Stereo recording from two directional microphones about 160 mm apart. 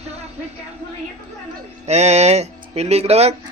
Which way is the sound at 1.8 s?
45° right (ahead or behind).